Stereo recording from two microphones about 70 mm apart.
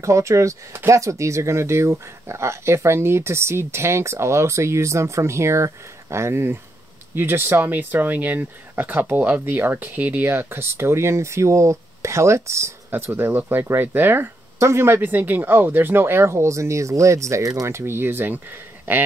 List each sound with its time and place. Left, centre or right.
0.0 s speech: right
15.0 s speech: right